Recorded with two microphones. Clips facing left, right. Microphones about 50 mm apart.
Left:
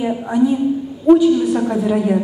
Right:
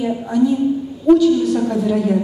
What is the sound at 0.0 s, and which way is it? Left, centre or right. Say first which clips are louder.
A woman's voice: even; left.